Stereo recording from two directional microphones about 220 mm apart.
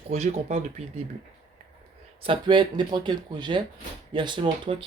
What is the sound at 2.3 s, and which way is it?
Speech, 20° right (ahead or behind).